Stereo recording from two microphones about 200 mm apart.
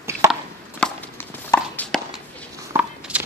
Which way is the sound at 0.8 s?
10° left (ahead or behind).